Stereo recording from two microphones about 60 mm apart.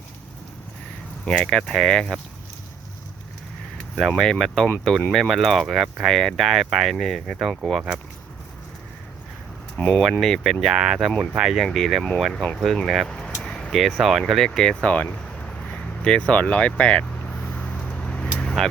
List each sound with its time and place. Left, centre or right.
1.2 s speech: centre
4.1 s speech: centre
9.7 s speech: centre
12.3 s speech: centre
12.7 s speech: centre
13.1 s vehicle: centre
13.7 s speech: centre
14.8 s a sound: left